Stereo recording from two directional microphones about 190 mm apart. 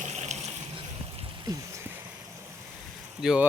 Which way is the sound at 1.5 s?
15° right (ahead or behind).